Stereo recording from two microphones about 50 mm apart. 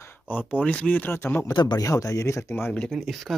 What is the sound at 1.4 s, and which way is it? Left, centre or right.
A man's voice, left.